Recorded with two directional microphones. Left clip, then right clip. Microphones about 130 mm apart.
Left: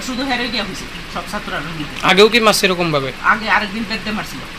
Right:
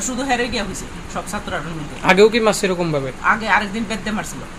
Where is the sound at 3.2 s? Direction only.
35° right (ahead or behind).